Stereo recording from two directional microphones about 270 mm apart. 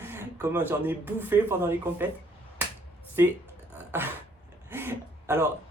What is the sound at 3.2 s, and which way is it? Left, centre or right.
Speech, centre.